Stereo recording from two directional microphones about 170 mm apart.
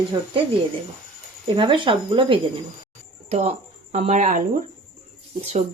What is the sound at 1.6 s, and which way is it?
Speech, 30° right (ahead or behind).